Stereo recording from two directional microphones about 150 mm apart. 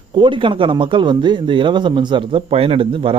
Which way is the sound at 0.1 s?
35° right (ahead or behind).